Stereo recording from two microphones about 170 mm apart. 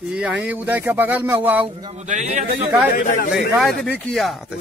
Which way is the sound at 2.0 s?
45° right (ahead or behind).